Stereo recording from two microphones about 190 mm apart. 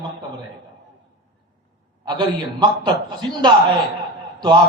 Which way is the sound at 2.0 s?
20° right (ahead or behind).